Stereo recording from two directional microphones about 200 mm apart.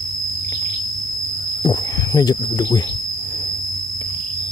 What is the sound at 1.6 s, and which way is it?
Speech, 20° left (ahead or behind).